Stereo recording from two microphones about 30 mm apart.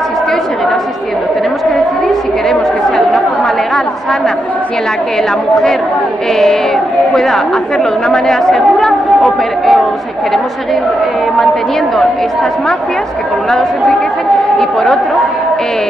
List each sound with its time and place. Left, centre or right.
3.1 s chatter: centre
6.3 s a woman's voice: centre
14.6 s speech: centre